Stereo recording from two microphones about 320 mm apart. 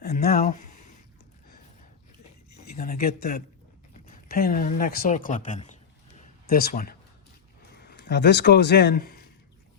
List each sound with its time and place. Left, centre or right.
0.0 s speech: left
2.7 s a man's voice: left